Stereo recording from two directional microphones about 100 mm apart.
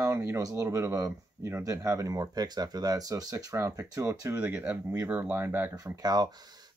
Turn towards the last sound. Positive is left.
turn(degrees=-40)  # may be behind; listen again after turning